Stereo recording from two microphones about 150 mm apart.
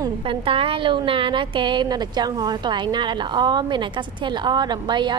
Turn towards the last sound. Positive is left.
turn(degrees=-30)  # may be behind; listen again after turning